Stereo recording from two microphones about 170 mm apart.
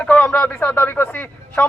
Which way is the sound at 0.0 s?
5° left (ahead or behind).